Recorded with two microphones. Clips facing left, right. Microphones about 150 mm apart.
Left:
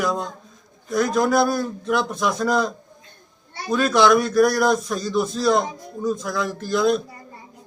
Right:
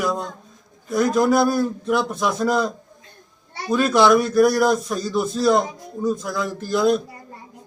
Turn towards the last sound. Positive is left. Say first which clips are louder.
# right 1 dB
turn(degrees=-5)  # may be behind; listen again after turning